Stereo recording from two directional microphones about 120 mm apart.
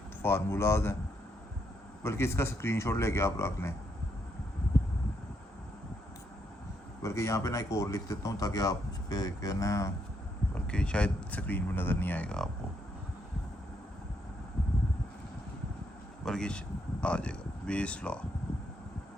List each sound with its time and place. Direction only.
0.2 s speech: 20° left (ahead or behind)
2.0 s speech: 20° left (ahead or behind)
7.0 s speech: 25° left (ahead or behind)
10.5 s speech: 10° left (ahead or behind)
16.2 s speech: 5° left (ahead or behind)